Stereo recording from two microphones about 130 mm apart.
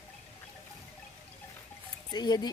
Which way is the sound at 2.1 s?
30° left (ahead or behind).